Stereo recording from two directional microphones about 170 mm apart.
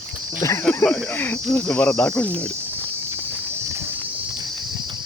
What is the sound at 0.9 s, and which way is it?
Cricket, 5° left (ahead or behind).